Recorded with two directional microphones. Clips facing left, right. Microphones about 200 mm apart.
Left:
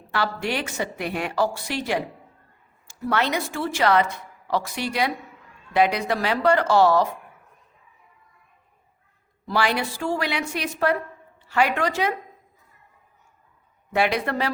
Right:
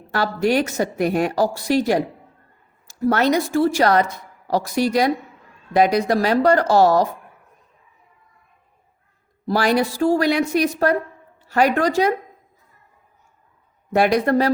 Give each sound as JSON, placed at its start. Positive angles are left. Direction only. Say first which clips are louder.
{"t": 0.1, "sound": "speech", "louder": "right 7 dB", "side_deg": -40}
{"t": 9.5, "sound": "speech", "louder": "right 6 dB", "side_deg": -40}
{"t": 13.9, "sound": "speech", "louder": "right 7 dB", "side_deg": -40}